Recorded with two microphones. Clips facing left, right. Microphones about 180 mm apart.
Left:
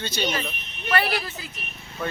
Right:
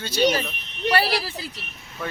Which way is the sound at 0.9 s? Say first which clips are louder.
Right 1 dB; 30° right (ahead or behind).